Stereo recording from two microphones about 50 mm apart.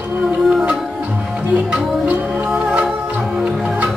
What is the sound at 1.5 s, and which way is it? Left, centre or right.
Music, right.